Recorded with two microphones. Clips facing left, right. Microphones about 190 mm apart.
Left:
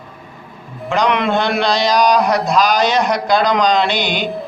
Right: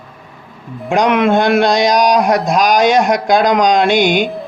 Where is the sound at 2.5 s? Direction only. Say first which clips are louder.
Right 3 dB; 50° right (ahead or behind).